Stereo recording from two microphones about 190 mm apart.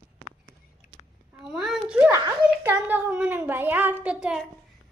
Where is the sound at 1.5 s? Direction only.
Centre (ahead or behind).